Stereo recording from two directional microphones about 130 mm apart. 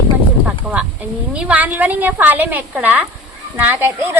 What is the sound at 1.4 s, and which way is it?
A woman's voice, 10° right (ahead or behind).